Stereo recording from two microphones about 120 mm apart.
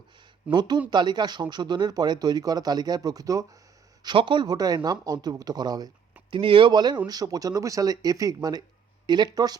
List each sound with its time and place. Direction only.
0.4 s speech: 10° right (ahead or behind)
0.9 s speech: 35° right (ahead or behind)
4.0 s speech: 40° right (ahead or behind)
6.3 s speech: 45° right (ahead or behind)